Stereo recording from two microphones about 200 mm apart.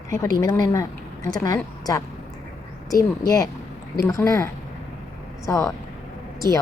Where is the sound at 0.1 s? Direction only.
15° left (ahead or behind).